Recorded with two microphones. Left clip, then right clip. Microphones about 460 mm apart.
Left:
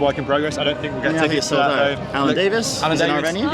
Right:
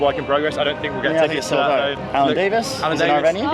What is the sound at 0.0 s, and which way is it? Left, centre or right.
A man's voice, left.